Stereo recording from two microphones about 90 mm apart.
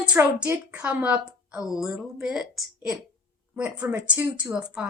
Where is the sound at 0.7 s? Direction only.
15° right (ahead or behind).